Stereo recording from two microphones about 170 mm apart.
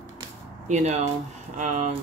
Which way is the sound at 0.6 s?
45° right (ahead or behind).